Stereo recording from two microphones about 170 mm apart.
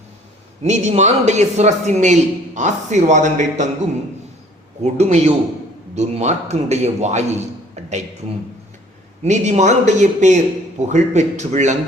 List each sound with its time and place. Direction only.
0.6 s speech: 45° right (ahead or behind)
4.8 s a man's voice: 40° right (ahead or behind)
9.2 s speech: 45° right (ahead or behind)